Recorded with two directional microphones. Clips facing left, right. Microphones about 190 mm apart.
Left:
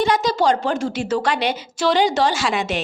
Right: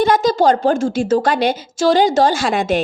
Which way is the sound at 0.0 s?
50° right (ahead or behind).